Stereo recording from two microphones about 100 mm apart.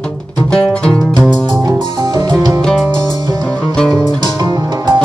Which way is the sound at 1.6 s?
45° right (ahead or behind).